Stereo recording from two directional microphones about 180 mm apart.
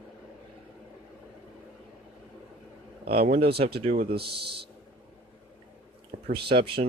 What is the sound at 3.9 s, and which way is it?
Speech, 35° right (ahead or behind).